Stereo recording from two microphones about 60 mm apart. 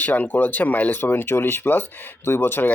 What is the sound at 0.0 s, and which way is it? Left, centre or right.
Speech, left.